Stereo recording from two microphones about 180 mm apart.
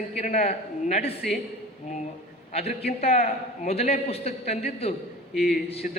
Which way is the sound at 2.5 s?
35° left (ahead or behind).